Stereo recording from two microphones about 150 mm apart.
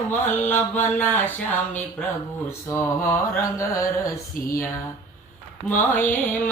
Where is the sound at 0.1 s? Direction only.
15° left (ahead or behind).